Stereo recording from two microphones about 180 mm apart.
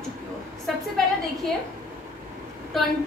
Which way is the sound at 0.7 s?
Centre (ahead or behind).